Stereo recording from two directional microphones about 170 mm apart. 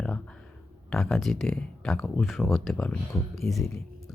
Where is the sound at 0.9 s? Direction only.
5° left (ahead or behind).